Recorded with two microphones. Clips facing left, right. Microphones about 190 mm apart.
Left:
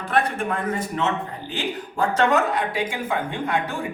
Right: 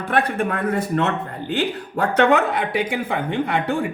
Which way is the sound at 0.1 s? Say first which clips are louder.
Right 2 dB; 60° right (ahead or behind).